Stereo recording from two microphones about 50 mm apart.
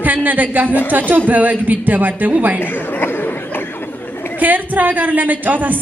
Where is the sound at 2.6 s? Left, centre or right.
Left.